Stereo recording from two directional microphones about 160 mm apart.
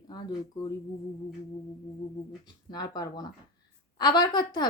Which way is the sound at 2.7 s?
25° left (ahead or behind).